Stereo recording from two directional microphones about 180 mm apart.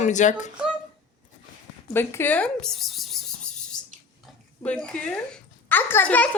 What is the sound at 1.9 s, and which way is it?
Speech, 10° left (ahead or behind).